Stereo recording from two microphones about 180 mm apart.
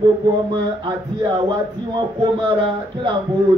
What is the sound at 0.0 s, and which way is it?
Speech, 25° right (ahead or behind).